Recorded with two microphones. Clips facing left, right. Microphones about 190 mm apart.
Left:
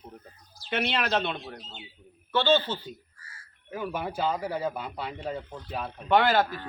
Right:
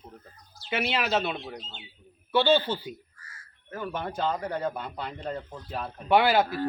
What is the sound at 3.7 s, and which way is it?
Speech, 10° left (ahead or behind).